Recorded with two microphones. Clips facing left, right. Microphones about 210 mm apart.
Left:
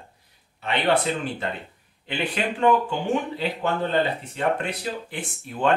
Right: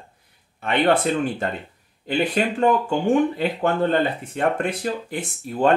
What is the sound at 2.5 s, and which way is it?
Speech, 45° right (ahead or behind).